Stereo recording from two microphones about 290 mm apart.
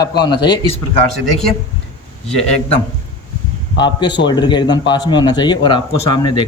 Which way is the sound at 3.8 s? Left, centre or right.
Centre.